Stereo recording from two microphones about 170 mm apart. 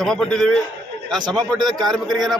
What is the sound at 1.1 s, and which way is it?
Speech, 25° right (ahead or behind).